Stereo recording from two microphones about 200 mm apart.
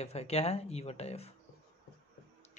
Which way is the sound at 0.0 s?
30° left (ahead or behind).